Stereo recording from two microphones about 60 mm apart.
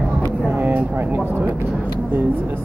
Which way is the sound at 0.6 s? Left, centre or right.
Right.